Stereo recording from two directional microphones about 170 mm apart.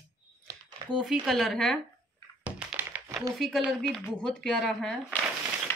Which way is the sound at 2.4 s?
10° right (ahead or behind).